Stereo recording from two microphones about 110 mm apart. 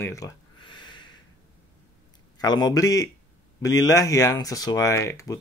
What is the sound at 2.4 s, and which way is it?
Speech, 40° left (ahead or behind).